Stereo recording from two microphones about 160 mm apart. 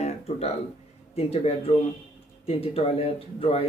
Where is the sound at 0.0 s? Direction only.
40° left (ahead or behind).